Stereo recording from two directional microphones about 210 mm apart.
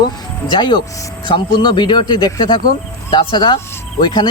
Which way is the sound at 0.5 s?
20° left (ahead or behind).